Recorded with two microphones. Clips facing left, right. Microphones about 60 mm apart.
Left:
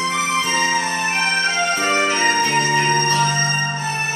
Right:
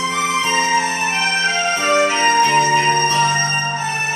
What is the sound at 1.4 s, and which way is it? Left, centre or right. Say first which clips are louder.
Music: right 1 dB; right.